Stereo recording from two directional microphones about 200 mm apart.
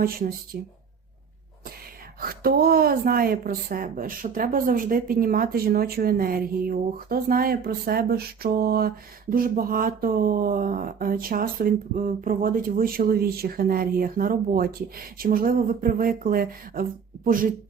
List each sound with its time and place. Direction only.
0.0 s speech: 45° right (ahead or behind)
2.2 s speech: 50° right (ahead or behind)